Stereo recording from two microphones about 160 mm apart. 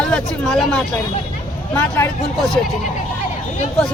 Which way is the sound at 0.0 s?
5° left (ahead or behind).